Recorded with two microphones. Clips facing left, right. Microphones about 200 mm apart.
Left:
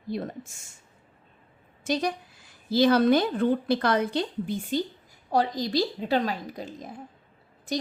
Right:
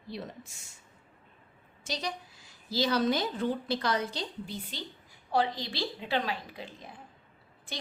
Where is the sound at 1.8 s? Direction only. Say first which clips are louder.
Left 9 dB; 55° left (ahead or behind).